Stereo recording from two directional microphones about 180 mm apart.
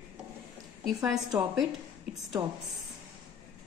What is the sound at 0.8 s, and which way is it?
Speech, centre (ahead or behind).